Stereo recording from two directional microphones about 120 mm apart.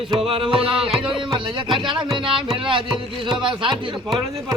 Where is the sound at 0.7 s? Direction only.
5° right (ahead or behind).